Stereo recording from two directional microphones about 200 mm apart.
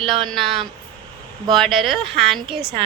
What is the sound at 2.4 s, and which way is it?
Speech, 25° right (ahead or behind).